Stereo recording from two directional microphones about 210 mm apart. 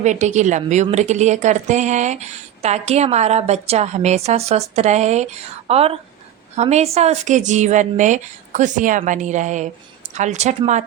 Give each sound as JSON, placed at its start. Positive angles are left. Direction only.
{"t": 0.0, "sound": "a woman's voice", "side_deg": -35}